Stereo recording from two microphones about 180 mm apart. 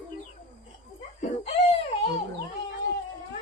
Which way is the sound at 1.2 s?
35° left (ahead or behind).